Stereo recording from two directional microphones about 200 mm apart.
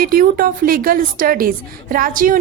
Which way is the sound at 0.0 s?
45° right (ahead or behind).